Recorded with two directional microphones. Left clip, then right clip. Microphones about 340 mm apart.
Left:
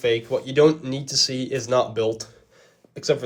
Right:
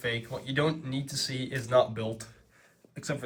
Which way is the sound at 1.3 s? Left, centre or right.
Left.